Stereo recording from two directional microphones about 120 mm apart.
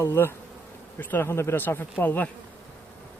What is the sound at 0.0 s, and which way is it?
Speech, 20° left (ahead or behind).